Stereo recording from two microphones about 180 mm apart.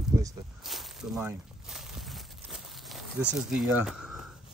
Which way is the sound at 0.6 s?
Centre (ahead or behind).